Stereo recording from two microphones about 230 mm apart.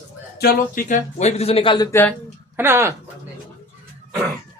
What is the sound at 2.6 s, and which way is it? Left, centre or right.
Speech, centre.